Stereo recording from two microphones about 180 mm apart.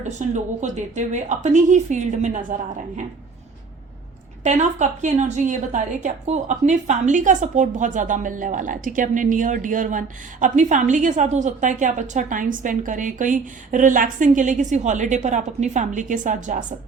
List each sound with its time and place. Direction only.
0.0 s a woman's voice: 40° right (ahead or behind)
4.4 s a woman's voice: 40° right (ahead or behind)